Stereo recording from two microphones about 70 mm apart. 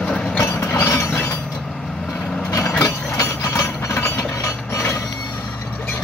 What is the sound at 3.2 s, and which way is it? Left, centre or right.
Train, left.